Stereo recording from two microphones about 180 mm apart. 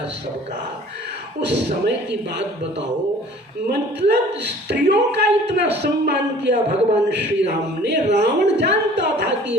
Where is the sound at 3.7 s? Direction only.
65° right (ahead or behind).